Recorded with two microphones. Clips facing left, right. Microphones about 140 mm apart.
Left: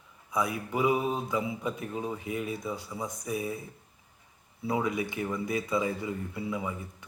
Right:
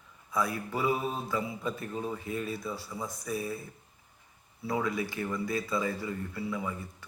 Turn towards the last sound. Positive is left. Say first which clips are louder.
# left 1 dB
turn(degrees=15)  # may be behind; listen again after turning